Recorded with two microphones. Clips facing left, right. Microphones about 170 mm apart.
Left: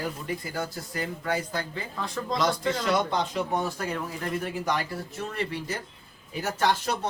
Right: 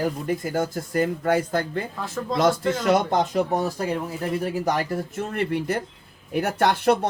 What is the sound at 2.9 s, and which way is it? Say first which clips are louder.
Speech: right 7 dB; 50° right (ahead or behind).